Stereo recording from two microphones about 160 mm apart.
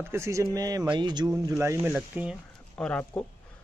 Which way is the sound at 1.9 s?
5° right (ahead or behind).